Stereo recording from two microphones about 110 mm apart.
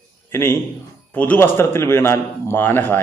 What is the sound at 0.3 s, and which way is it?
A man's voice, 20° left (ahead or behind).